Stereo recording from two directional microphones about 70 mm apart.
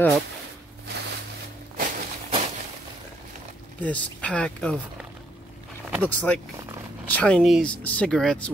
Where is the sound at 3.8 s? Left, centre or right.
Centre.